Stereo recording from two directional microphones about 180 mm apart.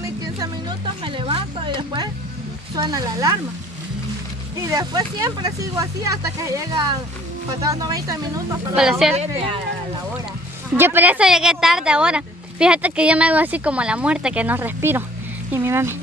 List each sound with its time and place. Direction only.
0.4 s music: 25° right (ahead or behind)
2.7 s speech: 20° right (ahead or behind)
4.6 s speech: 20° right (ahead or behind)
8.7 s speech: 5° right (ahead or behind)
9.1 s speech: 35° right (ahead or behind)
10.7 s speech: 10° right (ahead or behind)